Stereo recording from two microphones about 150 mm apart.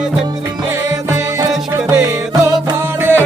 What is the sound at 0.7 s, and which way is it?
Music, 20° right (ahead or behind).